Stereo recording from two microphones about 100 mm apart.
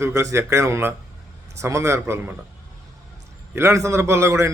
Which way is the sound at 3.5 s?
25° right (ahead or behind).